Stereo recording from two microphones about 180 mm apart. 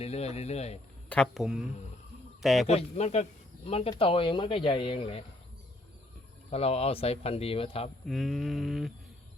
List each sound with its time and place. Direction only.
0.0 s speech: 35° left (ahead or behind)
1.1 s a sound: centre (ahead or behind)
2.4 s a man's voice: centre (ahead or behind)
2.6 s speech: 35° left (ahead or behind)
6.5 s speech: 35° left (ahead or behind)
8.0 s a sound: centre (ahead or behind)